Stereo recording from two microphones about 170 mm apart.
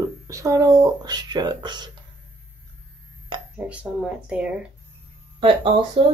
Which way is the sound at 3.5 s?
5° right (ahead or behind).